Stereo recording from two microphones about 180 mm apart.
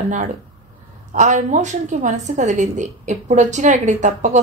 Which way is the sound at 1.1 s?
40° right (ahead or behind).